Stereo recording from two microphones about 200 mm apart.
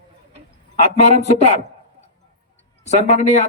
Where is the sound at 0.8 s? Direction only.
30° left (ahead or behind).